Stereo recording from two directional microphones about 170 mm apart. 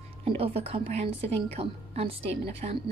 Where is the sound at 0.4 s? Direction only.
35° right (ahead or behind).